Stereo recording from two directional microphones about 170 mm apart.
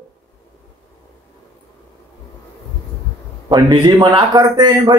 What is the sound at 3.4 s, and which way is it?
A man's voice, 25° right (ahead or behind).